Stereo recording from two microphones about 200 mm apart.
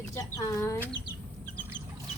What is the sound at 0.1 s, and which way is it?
Speech, 15° left (ahead or behind).